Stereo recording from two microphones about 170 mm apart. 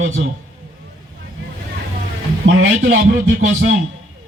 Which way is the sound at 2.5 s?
80° right.